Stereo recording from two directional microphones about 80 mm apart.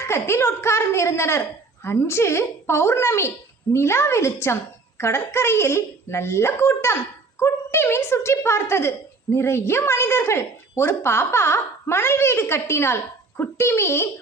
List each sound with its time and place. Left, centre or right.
0.0 s speech: left